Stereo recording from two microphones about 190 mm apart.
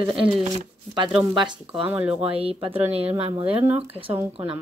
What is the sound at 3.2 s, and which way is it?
Speech, 30° right (ahead or behind).